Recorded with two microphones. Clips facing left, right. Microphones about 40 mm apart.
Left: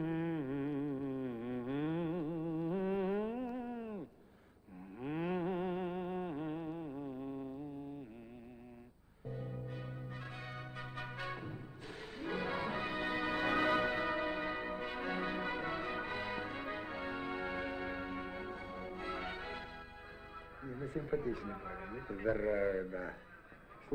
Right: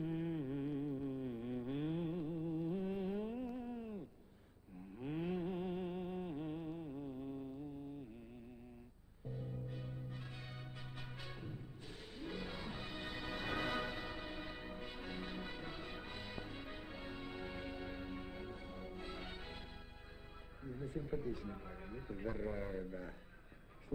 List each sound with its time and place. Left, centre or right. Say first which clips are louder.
0.0 s a sound: left 4 dB; left
4.9 s music: left 4 dB; left
9.3 s music: left 3 dB; centre
9.6 s brass instrument: left 3 dB; left
10.3 s change ringing: left 6 dB; left
11.0 s music: left 9 dB; left
11.9 s music: left 7 dB; left
12.2 s music: left 8 dB; left
13.4 s music: left 7 dB; left
15.1 s music: left 9 dB; left
20.7 s music: left 3 dB; left
21.1 s a man's voice: left 6 dB; left
21.5 s a sound: left 6 dB; left
22.2 s a man's voice: left 10 dB; left